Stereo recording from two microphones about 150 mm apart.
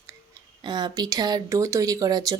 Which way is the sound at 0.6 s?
30° right (ahead or behind).